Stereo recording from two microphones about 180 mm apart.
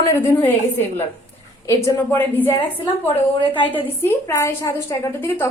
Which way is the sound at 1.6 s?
10° left (ahead or behind).